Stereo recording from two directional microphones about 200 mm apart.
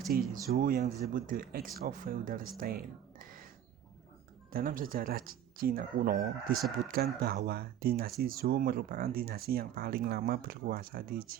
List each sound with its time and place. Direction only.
0.1 s speech: 50° right (ahead or behind)
4.5 s speech: 45° right (ahead or behind)